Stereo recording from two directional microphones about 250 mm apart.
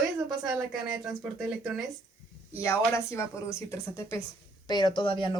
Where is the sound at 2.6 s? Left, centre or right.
Centre.